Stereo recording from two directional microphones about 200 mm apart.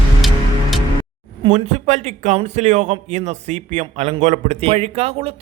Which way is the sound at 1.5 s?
35° right (ahead or behind).